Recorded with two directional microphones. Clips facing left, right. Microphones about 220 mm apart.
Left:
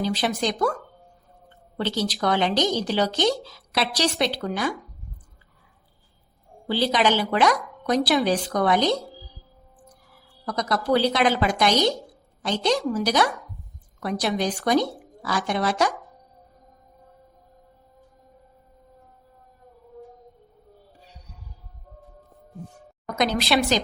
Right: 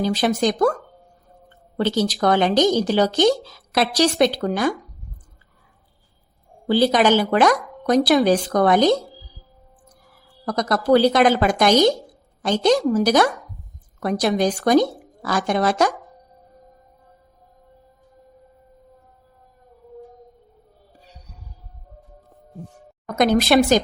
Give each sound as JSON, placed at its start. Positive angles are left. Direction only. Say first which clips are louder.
{"t": 0.0, "sound": "speech", "louder": "right 5 dB", "side_deg": -45}
{"t": 1.8, "sound": "speech", "louder": "right 5 dB", "side_deg": -45}
{"t": 6.7, "sound": "speech", "louder": "right 6 dB", "side_deg": -45}
{"t": 10.4, "sound": "a woman's voice", "louder": "right 5 dB", "side_deg": -45}
{"t": 23.1, "sound": "speech", "louder": "right 7 dB", "side_deg": -50}